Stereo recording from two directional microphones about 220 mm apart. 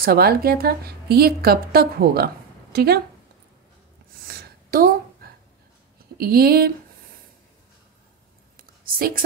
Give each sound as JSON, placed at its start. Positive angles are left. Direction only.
{"t": 0.0, "sound": "speech", "side_deg": -45}
{"t": 4.3, "sound": "a sound", "side_deg": -40}
{"t": 6.1, "sound": "speech", "side_deg": -45}
{"t": 8.5, "sound": "whispering", "side_deg": -40}